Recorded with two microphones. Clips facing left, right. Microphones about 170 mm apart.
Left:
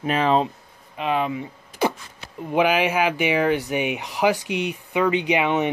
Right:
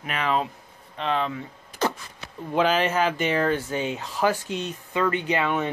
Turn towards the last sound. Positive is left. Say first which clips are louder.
# left 4 dB
turn(degrees=15)  # may be behind; listen again after turning